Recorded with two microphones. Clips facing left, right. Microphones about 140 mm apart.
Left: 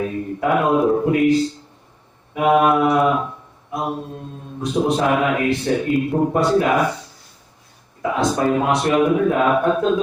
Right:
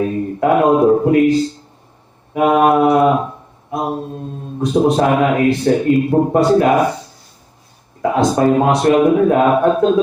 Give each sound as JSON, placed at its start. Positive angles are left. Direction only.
{"t": 0.0, "sound": "a man's voice", "side_deg": -40}
{"t": 8.0, "sound": "a man's voice", "side_deg": -40}